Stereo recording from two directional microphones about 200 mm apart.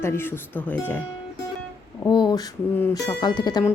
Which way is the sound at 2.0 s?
20° left (ahead or behind).